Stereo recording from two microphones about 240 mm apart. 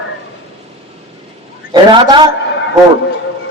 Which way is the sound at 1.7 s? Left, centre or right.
Centre.